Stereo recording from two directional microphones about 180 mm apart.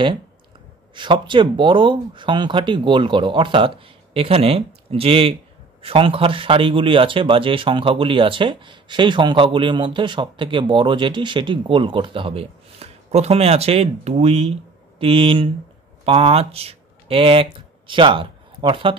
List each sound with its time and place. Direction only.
0.9 s a man's voice: 25° right (ahead or behind)